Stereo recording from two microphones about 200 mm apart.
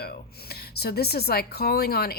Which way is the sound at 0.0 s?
50° left (ahead or behind).